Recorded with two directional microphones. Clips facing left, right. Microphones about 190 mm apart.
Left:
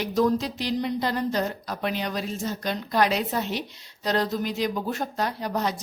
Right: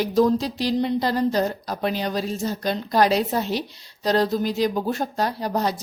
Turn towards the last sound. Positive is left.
turn(degrees=-35)  # may be behind; listen again after turning